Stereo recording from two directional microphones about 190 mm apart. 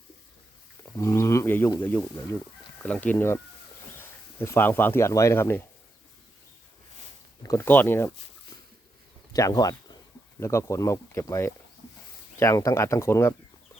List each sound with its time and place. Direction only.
0.9 s speech: 15° left (ahead or behind)
7.4 s speech: 15° left (ahead or behind)
9.3 s speech: 20° left (ahead or behind)